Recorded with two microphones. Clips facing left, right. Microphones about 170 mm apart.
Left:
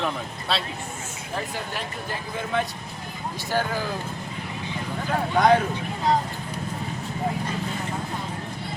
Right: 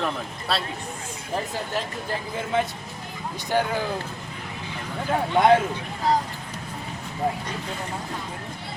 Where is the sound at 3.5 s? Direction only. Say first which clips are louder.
Right 2 dB; 20° right (ahead or behind).